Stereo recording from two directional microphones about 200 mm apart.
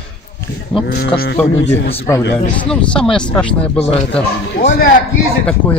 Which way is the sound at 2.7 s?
5° left (ahead or behind).